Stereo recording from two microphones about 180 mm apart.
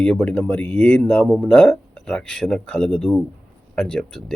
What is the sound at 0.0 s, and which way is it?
Speech, 5° left (ahead or behind).